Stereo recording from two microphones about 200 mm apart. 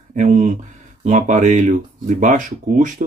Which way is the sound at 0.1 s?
40° right (ahead or behind).